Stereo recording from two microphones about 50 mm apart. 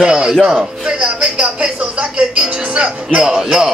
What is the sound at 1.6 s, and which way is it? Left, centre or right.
Speech, centre.